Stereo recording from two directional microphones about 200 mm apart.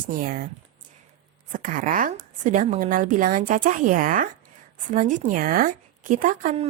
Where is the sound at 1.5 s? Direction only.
40° right (ahead or behind).